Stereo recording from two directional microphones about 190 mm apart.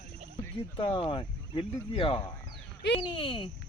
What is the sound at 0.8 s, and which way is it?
Speech, 25° left (ahead or behind).